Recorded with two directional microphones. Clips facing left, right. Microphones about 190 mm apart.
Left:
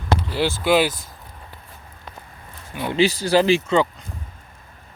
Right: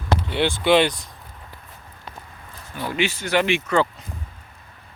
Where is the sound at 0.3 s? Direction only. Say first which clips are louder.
Right 2 dB; centre (ahead or behind).